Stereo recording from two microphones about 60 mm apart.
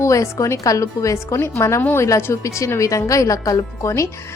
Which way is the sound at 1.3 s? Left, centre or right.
Left.